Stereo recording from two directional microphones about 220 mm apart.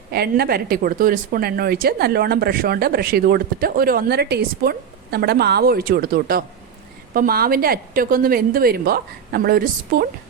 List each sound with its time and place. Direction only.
0.1 s a woman's voice: 45° right (ahead or behind)